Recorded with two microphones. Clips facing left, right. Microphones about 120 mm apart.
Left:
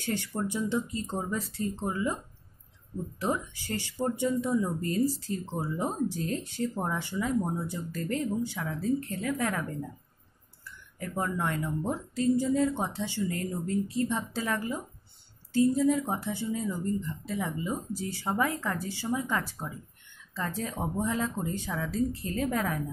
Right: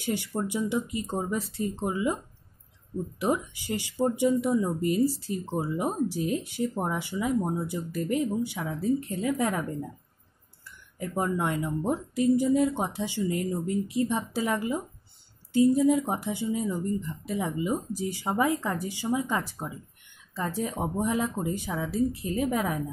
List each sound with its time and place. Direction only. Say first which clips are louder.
0.0 s speech: right 2 dB; 15° right (ahead or behind)
3.2 s speech: right 3 dB; 15° right (ahead or behind)
10.6 s speech: right 3 dB; 20° right (ahead or behind)